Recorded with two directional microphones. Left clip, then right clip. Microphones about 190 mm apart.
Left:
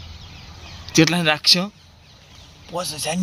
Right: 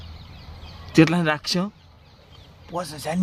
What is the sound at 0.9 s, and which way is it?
Speech, 20° right (ahead or behind).